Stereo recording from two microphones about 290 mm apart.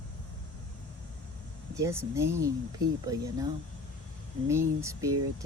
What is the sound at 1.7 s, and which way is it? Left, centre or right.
Speech, centre.